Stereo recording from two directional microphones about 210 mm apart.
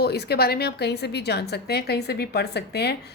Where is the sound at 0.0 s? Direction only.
50° left (ahead or behind).